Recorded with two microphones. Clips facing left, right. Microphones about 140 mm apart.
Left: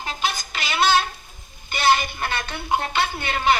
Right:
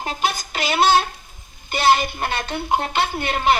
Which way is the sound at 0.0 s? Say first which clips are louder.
Right 3 dB; 55° right (ahead or behind).